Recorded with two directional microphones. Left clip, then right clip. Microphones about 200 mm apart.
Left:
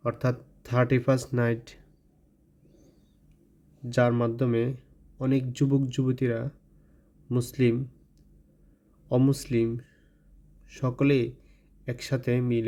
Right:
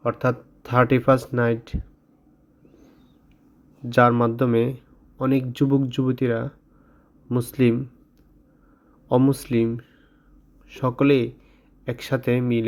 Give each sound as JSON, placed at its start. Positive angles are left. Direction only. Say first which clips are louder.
{"t": 0.0, "sound": "speech", "louder": "right 6 dB", "side_deg": 0}
{"t": 3.8, "sound": "speech", "louder": "right 7 dB", "side_deg": -5}
{"t": 9.0, "sound": "speech", "louder": "right 6 dB", "side_deg": -5}